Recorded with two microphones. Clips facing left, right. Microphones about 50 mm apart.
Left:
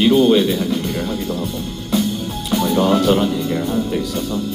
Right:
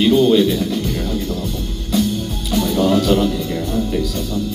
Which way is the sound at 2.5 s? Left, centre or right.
Centre.